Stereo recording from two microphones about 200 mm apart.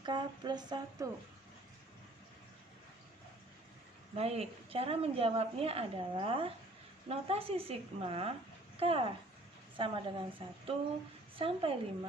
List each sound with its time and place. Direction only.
0.0 s a woman's voice: 20° right (ahead or behind)
4.1 s a woman's voice: 30° right (ahead or behind)